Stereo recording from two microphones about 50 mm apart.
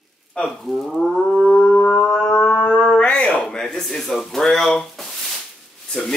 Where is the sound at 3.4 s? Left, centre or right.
Centre.